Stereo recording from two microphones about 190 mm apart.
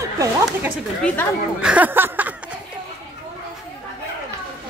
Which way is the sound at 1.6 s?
5° right (ahead or behind).